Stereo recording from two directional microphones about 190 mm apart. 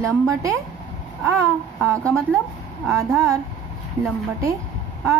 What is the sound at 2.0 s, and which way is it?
Speech, 5° left (ahead or behind).